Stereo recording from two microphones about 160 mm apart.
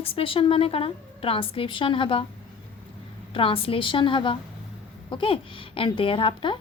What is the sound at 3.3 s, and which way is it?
A woman's voice, 35° left (ahead or behind).